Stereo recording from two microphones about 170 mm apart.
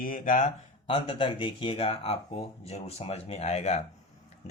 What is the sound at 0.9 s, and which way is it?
Speech, 30° left (ahead or behind).